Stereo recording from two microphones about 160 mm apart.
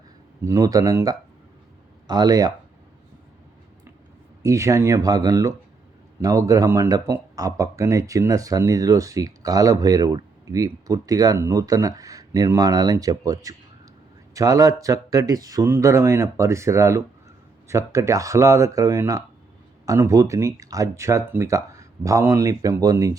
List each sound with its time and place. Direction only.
0.4 s speech: 20° right (ahead or behind)
4.4 s speech: 20° right (ahead or behind)